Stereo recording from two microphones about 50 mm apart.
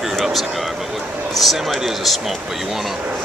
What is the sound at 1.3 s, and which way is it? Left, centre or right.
Speech, centre.